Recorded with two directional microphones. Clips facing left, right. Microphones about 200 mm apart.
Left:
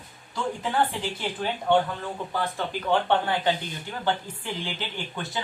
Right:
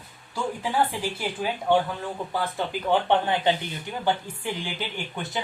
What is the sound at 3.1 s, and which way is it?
Speech, 20° right (ahead or behind).